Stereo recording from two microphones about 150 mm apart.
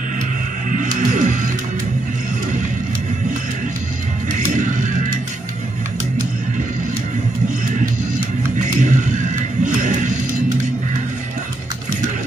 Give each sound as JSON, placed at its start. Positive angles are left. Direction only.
{"t": 0.7, "sound": "music", "side_deg": -60}
{"t": 8.5, "sound": "music", "side_deg": -55}